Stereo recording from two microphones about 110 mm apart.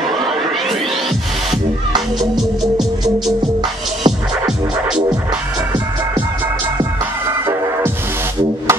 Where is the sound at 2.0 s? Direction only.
5° right (ahead or behind).